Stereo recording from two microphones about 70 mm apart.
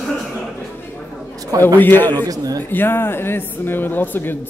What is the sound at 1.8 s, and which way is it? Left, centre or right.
Speech, left.